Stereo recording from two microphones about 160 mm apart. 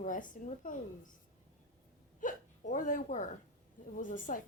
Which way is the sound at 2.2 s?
55° left (ahead or behind).